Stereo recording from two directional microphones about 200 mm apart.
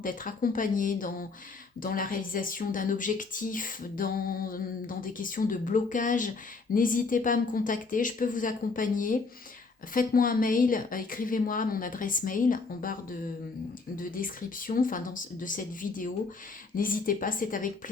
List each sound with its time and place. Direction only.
0.0 s a woman's voice: 45° left (ahead or behind)